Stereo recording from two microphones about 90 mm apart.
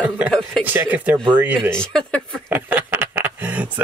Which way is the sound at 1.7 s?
10° left (ahead or behind).